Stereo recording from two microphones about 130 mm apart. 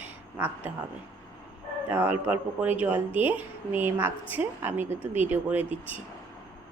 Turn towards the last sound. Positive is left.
turn(degrees=-15)  # may be behind; listen again after turning